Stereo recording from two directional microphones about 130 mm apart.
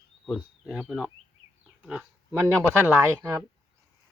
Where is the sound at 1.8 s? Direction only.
10° right (ahead or behind).